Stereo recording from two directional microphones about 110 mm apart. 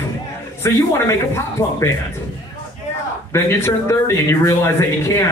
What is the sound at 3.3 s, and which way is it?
Speech, 25° left (ahead or behind).